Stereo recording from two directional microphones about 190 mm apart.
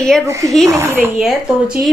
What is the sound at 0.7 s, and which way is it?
Speech, 15° right (ahead or behind).